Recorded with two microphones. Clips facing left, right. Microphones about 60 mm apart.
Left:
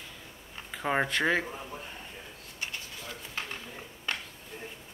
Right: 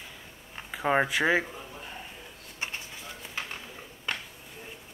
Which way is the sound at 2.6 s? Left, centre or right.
Right.